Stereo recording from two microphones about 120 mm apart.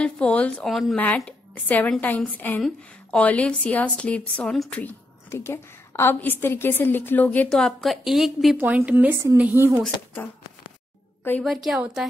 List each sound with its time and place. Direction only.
0.0 s speech: 10° left (ahead or behind)
0.9 s a woman's voice: 15° left (ahead or behind)
8.5 s speech: 15° right (ahead or behind)
11.4 s a woman's voice: centre (ahead or behind)